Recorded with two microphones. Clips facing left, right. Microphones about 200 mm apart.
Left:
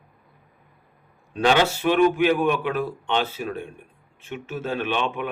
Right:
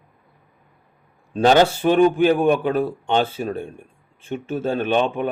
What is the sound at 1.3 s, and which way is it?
A man's voice, 40° right (ahead or behind).